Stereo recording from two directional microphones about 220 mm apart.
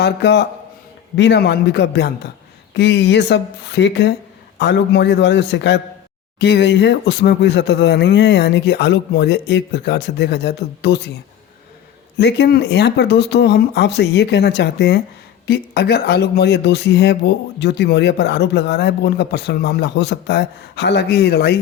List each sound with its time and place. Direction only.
0.0 s speech: 50° left (ahead or behind)
12.1 s speech: 50° left (ahead or behind)